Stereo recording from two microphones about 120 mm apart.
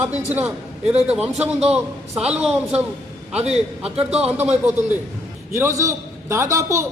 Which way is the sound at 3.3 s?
65° right (ahead or behind).